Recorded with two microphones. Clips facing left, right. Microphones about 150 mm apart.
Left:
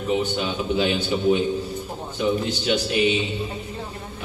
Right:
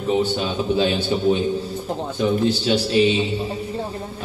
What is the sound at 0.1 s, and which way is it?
A man's voice, 30° right (ahead or behind).